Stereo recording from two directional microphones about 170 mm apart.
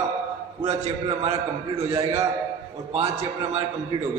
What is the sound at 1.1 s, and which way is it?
A man's voice, 40° right (ahead or behind).